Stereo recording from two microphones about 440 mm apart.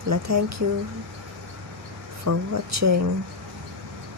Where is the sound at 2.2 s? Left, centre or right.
Right.